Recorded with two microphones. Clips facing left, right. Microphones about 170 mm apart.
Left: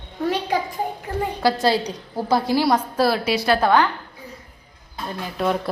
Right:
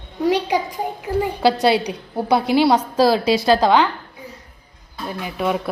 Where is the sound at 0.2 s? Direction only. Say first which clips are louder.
Right 4 dB; 15° right (ahead or behind).